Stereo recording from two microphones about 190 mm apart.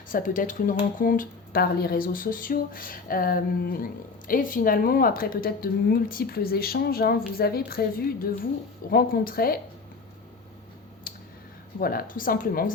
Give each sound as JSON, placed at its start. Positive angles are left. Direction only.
{"t": 0.1, "sound": "a woman's voice", "side_deg": 45}
{"t": 11.1, "sound": "a sound", "side_deg": 50}
{"t": 11.8, "sound": "a woman's voice", "side_deg": 50}